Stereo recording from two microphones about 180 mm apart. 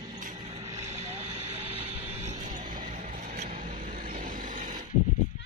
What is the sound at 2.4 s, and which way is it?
Vehicle, 45° right (ahead or behind).